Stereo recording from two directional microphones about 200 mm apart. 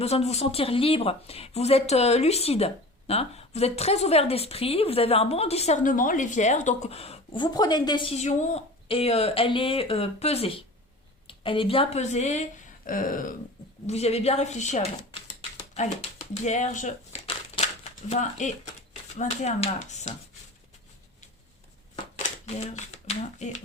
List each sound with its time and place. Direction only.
0.0 s speech: 30° left (ahead or behind)
13.8 s speech: 30° left (ahead or behind)
15.4 s a sound: 35° left (ahead or behind)
19.1 s speech: 35° left (ahead or behind)
22.5 s speech: 35° left (ahead or behind)